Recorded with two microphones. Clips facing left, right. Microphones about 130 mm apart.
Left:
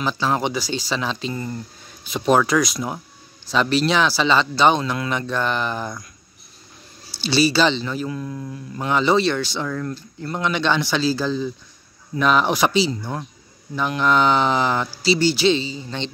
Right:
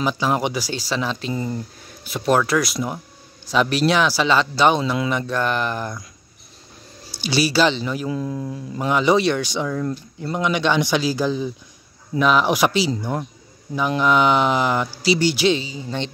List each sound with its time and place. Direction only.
0.0 s speech: 10° right (ahead or behind)
1.3 s speech: 15° right (ahead or behind)
2.2 s speech: 5° right (ahead or behind)
7.1 s speech: 10° right (ahead or behind)
8.2 s speech: 25° right (ahead or behind)
8.7 s speech: 10° right (ahead or behind)
12.2 s speech: 5° right (ahead or behind)